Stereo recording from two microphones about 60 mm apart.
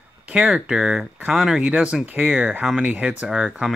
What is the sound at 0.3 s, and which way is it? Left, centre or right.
Speech, centre.